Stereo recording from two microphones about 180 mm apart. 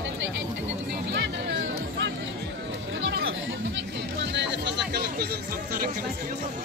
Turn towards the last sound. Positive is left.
turn(degrees=-55)  # may be behind; listen again after turning